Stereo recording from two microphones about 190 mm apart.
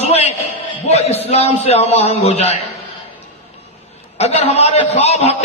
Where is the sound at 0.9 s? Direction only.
35° left (ahead or behind).